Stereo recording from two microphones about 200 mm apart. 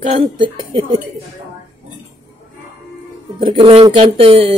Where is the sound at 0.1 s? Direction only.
25° right (ahead or behind).